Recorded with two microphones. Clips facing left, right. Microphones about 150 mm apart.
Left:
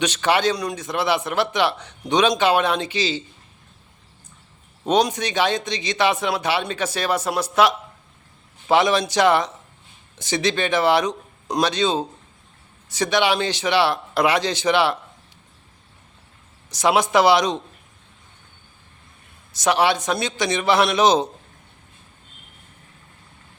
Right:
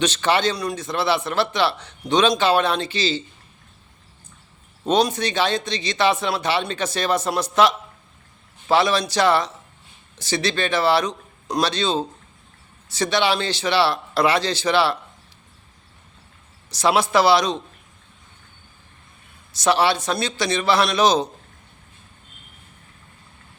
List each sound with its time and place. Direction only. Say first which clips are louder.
0.0 s a man's voice: even; 10° left (ahead or behind)
4.8 s a man's voice: even; 15° left (ahead or behind)
16.7 s a man's voice: left 1 dB; 15° left (ahead or behind)
19.5 s a man's voice: even; 15° left (ahead or behind)